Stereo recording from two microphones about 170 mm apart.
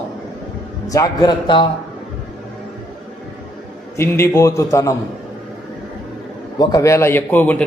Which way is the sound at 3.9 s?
15° left (ahead or behind).